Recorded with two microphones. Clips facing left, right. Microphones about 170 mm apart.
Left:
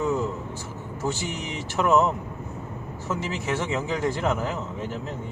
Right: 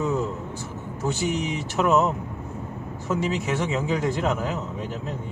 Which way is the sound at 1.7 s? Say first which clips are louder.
Even; 15° right (ahead or behind).